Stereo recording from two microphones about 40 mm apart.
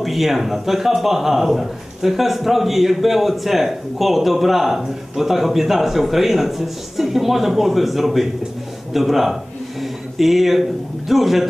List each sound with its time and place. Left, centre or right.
0.0 s a man's voice: centre
8.9 s a sound: centre
11.1 s a man's voice: centre